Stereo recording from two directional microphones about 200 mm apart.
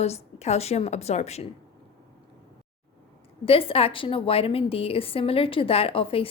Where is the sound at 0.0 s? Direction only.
30° left (ahead or behind).